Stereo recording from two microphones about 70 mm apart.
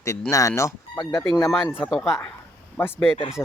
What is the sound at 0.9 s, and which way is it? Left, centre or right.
Speech, left.